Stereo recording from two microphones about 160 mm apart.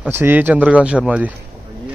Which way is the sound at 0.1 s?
10° right (ahead or behind).